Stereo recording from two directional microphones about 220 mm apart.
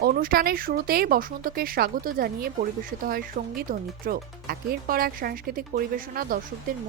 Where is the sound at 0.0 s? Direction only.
40° right (ahead or behind).